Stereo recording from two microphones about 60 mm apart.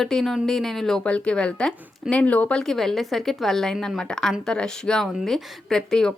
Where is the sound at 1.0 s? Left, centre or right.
Centre.